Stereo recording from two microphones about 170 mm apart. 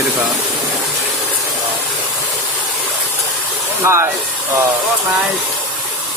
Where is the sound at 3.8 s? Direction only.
15° right (ahead or behind).